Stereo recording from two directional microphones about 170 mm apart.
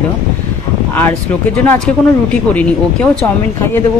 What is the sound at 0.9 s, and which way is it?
Speech, 10° left (ahead or behind).